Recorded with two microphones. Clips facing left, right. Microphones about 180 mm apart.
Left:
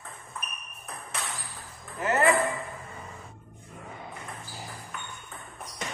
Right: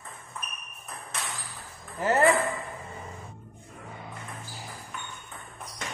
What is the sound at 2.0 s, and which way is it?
Speech, 30° right (ahead or behind).